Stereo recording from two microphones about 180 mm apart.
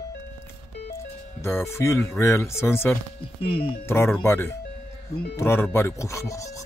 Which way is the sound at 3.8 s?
15° left (ahead or behind).